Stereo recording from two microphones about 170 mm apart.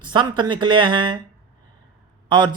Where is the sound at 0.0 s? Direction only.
25° right (ahead or behind).